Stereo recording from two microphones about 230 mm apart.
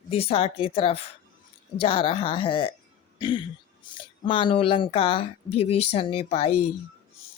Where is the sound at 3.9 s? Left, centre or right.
Left.